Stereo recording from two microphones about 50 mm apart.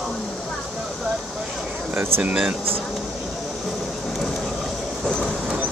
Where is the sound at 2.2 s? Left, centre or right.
Right.